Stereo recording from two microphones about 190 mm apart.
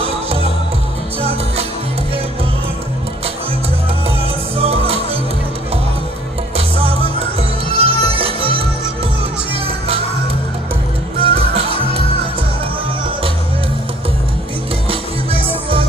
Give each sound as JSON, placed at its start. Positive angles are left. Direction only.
{"t": 0.0, "sound": "music", "side_deg": -30}
{"t": 4.6, "sound": "music", "side_deg": -30}
{"t": 7.7, "sound": "music", "side_deg": -30}
{"t": 11.1, "sound": "music", "side_deg": -30}